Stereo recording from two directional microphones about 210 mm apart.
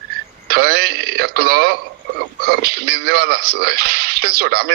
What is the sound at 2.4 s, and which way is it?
A man's voice, 45° right (ahead or behind).